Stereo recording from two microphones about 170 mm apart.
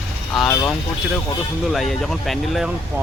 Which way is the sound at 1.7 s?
Centre (ahead or behind).